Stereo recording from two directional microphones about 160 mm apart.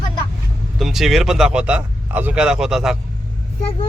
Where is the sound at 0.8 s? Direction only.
Centre (ahead or behind).